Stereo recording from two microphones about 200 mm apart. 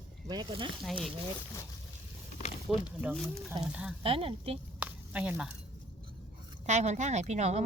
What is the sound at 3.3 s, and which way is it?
Speech, 20° right (ahead or behind).